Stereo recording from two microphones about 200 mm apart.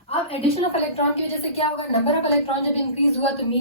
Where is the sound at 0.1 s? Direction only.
30° left (ahead or behind).